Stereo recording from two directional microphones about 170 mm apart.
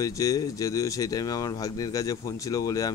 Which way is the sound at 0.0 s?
20° left (ahead or behind).